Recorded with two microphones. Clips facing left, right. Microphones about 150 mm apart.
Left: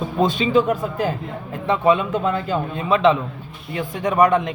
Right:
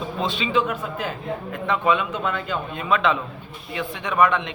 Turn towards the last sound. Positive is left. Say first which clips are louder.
# left 4 dB
turn(degrees=40)  # may be behind; listen again after turning